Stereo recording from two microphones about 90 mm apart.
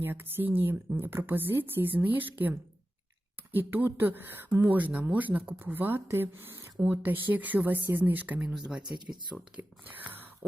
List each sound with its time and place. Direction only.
0.0 s speech: 20° right (ahead or behind); by 9.5 s 5° right (ahead or behind)